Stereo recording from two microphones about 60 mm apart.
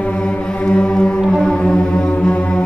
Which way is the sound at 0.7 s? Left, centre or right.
Centre.